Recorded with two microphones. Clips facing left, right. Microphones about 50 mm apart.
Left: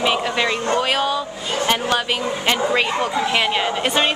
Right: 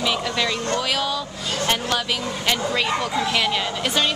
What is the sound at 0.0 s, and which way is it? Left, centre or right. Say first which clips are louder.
A woman's voice: left 4 dB; left.